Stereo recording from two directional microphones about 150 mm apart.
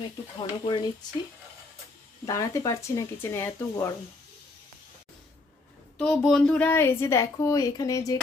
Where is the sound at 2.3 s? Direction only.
20° left (ahead or behind).